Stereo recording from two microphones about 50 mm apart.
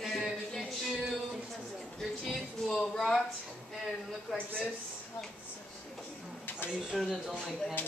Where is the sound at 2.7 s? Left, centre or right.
Centre.